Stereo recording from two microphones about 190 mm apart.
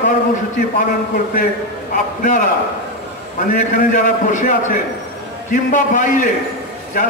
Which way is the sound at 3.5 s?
45° left (ahead or behind).